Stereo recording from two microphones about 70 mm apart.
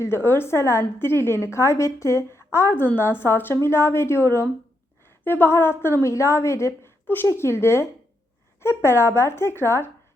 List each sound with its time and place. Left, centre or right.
0.0 s a woman's voice: left